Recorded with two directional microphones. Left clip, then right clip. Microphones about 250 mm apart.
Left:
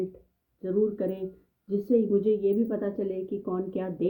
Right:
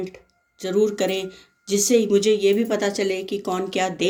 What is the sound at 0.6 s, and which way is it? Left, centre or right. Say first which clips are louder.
Speech: right 6 dB; right.